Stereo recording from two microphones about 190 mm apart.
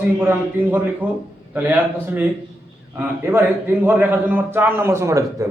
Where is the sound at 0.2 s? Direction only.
10° right (ahead or behind).